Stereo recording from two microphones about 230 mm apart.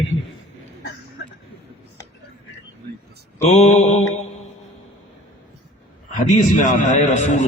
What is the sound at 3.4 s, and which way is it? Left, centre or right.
Speech, left.